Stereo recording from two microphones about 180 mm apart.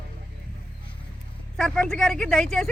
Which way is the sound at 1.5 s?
Centre (ahead or behind).